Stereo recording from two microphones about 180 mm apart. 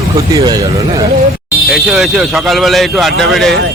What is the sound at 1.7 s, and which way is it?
Speech, centre (ahead or behind).